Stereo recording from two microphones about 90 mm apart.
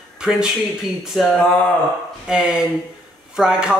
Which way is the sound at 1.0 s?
5° right (ahead or behind).